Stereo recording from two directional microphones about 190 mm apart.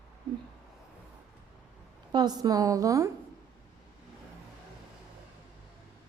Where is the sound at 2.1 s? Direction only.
20° right (ahead or behind).